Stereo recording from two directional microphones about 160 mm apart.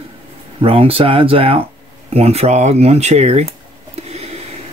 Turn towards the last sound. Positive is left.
turn(degrees=-40)  # may be behind; listen again after turning